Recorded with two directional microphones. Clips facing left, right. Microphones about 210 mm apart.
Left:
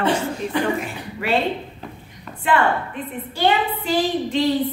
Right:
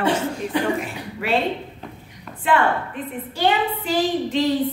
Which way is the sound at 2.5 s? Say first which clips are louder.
Even; centre (ahead or behind).